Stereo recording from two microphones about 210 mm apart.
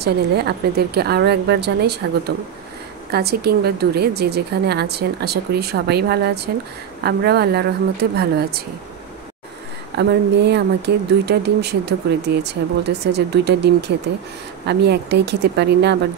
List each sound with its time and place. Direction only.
0.0 s a woman's voice: 50° right (ahead or behind)
9.9 s a woman's voice: 55° right (ahead or behind)